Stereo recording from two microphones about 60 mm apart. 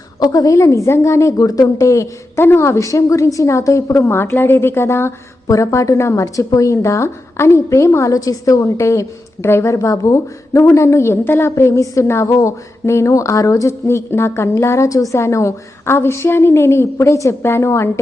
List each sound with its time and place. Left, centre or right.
0.2 s a woman's voice: left
1.4 s a woman's voice: left
2.4 s a woman's voice: left
4.1 s a woman's voice: left
5.5 s a woman's voice: left
6.2 s a woman's voice: left
8.1 s a woman's voice: left